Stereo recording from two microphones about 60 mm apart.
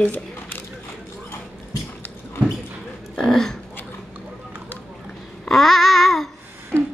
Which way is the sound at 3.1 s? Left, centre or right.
Centre.